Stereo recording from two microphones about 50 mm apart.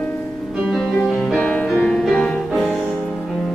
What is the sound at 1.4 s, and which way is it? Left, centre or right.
Music, left.